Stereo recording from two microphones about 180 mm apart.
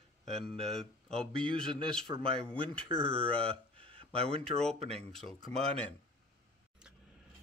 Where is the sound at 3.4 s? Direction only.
30° right (ahead or behind).